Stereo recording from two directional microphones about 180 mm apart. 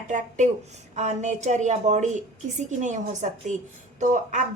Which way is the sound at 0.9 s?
40° right (ahead or behind).